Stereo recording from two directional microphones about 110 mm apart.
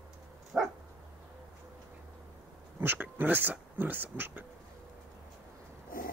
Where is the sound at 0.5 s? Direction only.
5° right (ahead or behind).